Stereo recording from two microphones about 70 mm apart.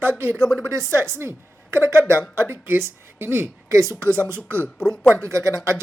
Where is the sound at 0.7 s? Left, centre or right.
Right.